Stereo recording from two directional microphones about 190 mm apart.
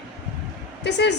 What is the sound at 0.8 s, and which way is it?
Speech, 65° left (ahead or behind).